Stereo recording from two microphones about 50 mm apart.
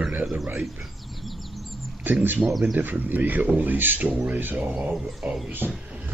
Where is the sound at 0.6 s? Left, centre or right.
Centre.